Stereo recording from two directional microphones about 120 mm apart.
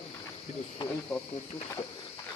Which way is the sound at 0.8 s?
40° left (ahead or behind).